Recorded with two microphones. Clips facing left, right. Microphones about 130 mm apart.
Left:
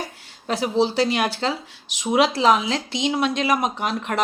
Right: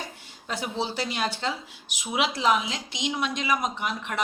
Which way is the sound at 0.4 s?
85° left.